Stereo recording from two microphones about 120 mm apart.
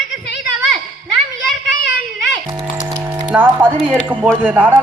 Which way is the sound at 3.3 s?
15° right (ahead or behind).